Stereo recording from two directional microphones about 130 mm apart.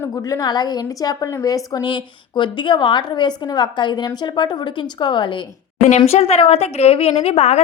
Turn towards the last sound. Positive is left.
turn(degrees=55)  # may be behind; listen again after turning